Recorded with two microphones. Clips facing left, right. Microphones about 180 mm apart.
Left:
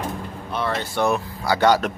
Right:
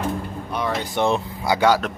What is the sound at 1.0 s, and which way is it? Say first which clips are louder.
Speech: right 1 dB; 25° right (ahead or behind).